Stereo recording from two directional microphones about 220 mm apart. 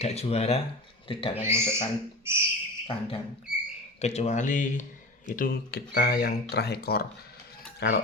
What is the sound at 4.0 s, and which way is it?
Speech, 30° left (ahead or behind).